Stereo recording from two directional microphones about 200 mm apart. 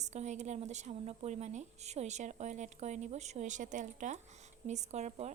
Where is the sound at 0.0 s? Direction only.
35° right (ahead or behind).